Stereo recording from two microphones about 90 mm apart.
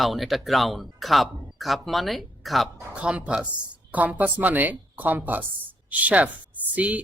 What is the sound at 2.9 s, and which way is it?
A woman's voice, 15° right (ahead or behind).